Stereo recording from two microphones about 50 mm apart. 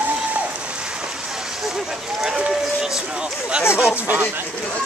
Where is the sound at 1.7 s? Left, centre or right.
Centre.